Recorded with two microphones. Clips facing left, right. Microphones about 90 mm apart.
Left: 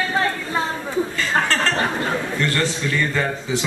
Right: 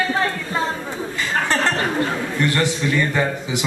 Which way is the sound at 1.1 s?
15° right (ahead or behind).